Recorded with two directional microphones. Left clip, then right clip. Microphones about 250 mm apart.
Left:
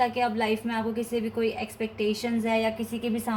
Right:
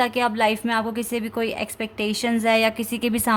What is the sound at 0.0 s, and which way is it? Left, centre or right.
A woman's voice, right.